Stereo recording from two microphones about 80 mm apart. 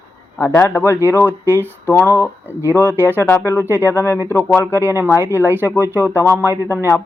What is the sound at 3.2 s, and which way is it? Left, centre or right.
Speech, left.